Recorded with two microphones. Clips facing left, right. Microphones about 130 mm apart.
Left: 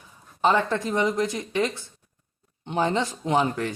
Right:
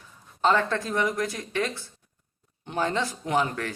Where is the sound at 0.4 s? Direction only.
15° left (ahead or behind).